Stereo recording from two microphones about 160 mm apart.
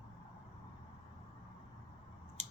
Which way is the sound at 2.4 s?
50° right (ahead or behind).